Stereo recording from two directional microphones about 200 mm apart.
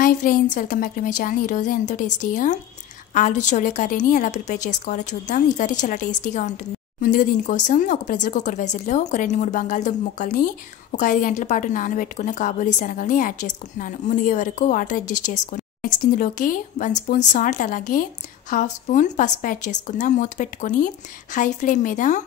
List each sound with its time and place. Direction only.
0.0 s a woman's voice: 45° left (ahead or behind)